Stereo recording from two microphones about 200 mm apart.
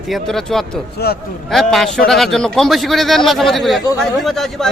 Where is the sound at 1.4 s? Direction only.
Centre (ahead or behind).